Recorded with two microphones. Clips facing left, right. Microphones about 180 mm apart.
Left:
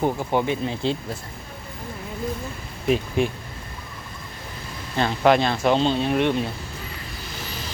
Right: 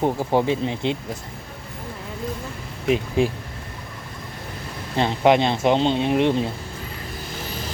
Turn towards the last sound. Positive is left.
turn(degrees=-25)  # may be behind; listen again after turning